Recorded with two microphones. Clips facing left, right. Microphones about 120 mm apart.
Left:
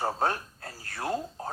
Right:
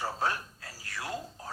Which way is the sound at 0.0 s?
50° left (ahead or behind).